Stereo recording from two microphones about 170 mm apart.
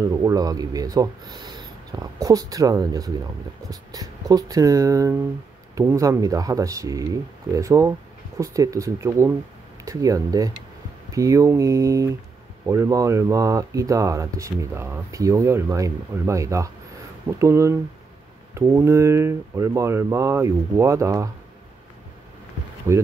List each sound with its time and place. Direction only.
0.1 s speech: 20° right (ahead or behind)
22.9 s speech: 15° right (ahead or behind)